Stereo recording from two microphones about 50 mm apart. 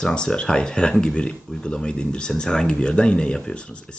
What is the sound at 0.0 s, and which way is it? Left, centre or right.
Speech, centre.